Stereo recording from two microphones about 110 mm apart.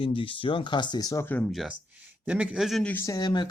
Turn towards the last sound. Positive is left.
turn(degrees=40)  # may be behind; listen again after turning